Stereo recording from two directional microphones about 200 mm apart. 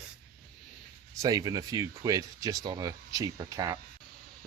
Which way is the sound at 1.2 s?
20° right (ahead or behind).